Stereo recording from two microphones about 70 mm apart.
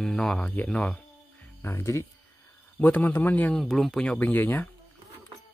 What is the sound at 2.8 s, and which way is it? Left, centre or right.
Speech, left.